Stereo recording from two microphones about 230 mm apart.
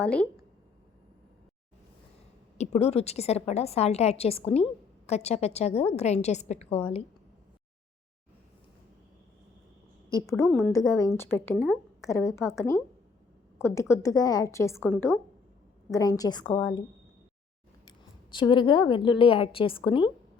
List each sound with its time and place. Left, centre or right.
0.0 s a woman's voice: centre
2.6 s a woman's voice: left
10.1 s a woman's voice: centre
10.4 s a woman's voice: centre
10.7 s a woman's voice: centre
17.8 s a woman's voice: centre